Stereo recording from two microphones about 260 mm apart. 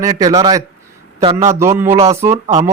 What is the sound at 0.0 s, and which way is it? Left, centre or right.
Speech, centre.